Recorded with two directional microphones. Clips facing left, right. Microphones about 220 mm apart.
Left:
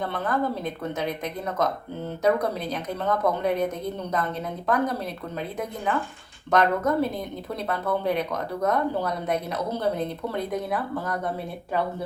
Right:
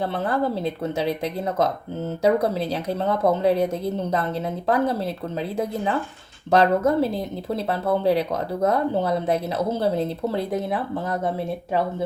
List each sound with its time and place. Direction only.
0.0 s speech: 30° right (ahead or behind)
6.5 s speech: 30° right (ahead or behind)